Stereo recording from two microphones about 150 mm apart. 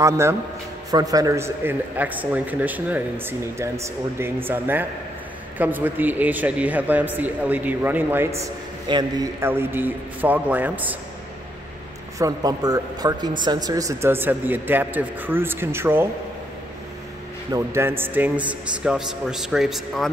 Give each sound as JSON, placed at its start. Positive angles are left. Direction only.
{"t": 0.0, "sound": "a man's voice", "side_deg": -20}
{"t": 8.8, "sound": "a man's voice", "side_deg": -30}
{"t": 9.4, "sound": "a man's voice", "side_deg": -15}
{"t": 12.2, "sound": "a man's voice", "side_deg": -25}
{"t": 17.5, "sound": "a man's voice", "side_deg": -20}